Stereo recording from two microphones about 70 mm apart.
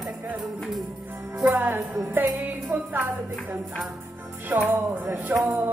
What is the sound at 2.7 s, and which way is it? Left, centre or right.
Music, right.